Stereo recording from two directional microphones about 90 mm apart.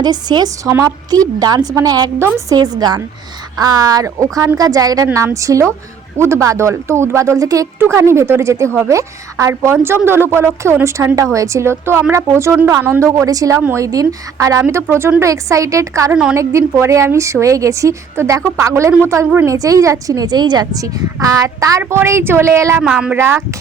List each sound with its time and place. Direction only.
0.0 s a woman's voice: 50° right (ahead or behind)
2.1 s speech: 30° right (ahead or behind)
2.6 s a woman's voice: 50° right (ahead or behind)
14.6 s speech: 25° right (ahead or behind)
22.8 s a woman's voice: 10° right (ahead or behind)
23.1 s speech: 30° right (ahead or behind)